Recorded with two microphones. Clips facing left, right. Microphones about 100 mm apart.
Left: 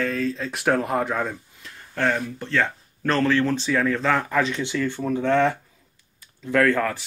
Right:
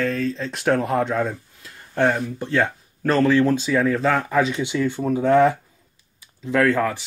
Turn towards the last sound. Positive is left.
turn(degrees=-5)  # may be behind; listen again after turning